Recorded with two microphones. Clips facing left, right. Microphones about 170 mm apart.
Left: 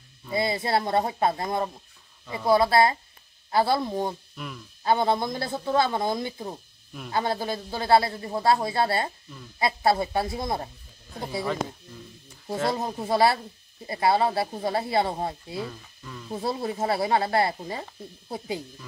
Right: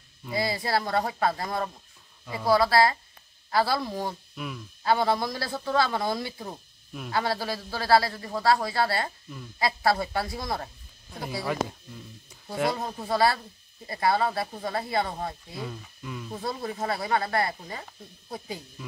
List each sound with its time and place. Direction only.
0.3 s a man's voice: 25° left (ahead or behind)
4.4 s speech: centre (ahead or behind)
4.8 s a man's voice: 20° left (ahead or behind)
12.7 s a man's voice: 20° left (ahead or behind)
15.5 s speech: centre (ahead or behind)
16.3 s a man's voice: 30° left (ahead or behind)